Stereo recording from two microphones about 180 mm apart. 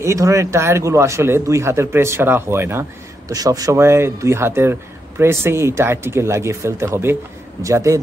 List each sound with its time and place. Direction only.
0.0 s speech: 15° right (ahead or behind)